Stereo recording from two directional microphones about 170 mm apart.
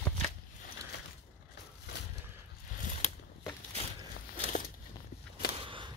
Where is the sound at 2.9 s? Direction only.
40° left (ahead or behind).